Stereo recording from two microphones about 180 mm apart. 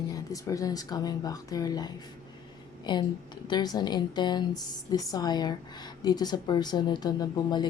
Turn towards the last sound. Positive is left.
turn(degrees=25)  # may be behind; listen again after turning